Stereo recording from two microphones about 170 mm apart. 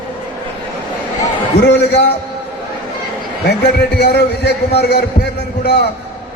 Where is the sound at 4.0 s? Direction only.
75° left (ahead or behind).